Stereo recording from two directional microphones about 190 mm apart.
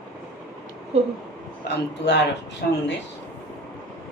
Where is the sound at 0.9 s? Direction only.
35° right (ahead or behind).